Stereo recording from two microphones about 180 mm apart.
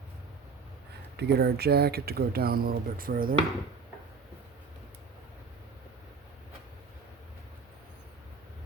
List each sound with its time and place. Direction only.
1.1 s speech: 65° right (ahead or behind)